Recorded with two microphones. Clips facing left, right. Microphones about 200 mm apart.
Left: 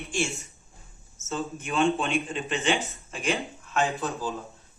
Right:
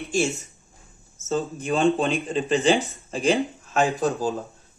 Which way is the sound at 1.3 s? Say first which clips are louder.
Right 7 dB; 35° right (ahead or behind).